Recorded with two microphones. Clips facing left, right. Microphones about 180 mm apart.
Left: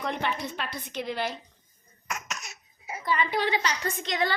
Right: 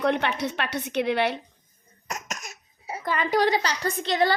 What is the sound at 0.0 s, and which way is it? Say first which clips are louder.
A woman's voice: right 6 dB; 70° right (ahead or behind).